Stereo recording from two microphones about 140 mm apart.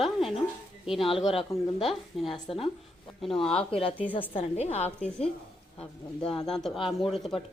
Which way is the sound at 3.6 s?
40° left (ahead or behind).